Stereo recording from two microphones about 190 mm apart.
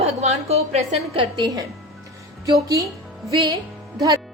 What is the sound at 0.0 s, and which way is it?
A woman's voice, 35° right (ahead or behind).